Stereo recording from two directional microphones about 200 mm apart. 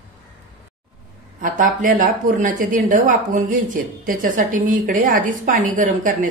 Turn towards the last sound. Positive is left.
turn(degrees=-40)  # may be behind; listen again after turning